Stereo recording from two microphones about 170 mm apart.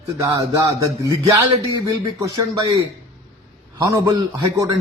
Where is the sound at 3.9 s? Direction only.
20° right (ahead or behind).